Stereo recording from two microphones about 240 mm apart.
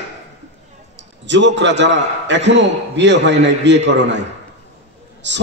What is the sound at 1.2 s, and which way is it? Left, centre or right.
A man's voice, right.